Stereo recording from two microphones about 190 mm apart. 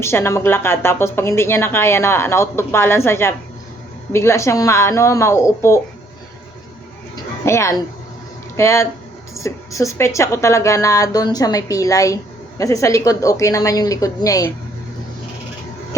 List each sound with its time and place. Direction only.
0.0 s a woman's voice: 15° left (ahead or behind)
7.4 s a woman's voice: 15° left (ahead or behind)